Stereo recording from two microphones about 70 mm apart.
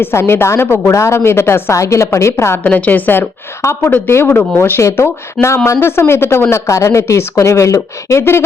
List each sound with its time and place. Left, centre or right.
0.0 s a woman's voice: left
1.7 s speech: left
2.6 s a woman's voice: left
3.6 s a woman's voice: left
4.8 s a woman's voice: left